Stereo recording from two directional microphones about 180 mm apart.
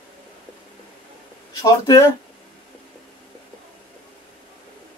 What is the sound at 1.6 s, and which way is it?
Speech, 20° left (ahead or behind).